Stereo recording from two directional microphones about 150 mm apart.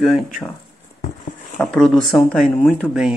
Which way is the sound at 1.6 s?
5° left (ahead or behind).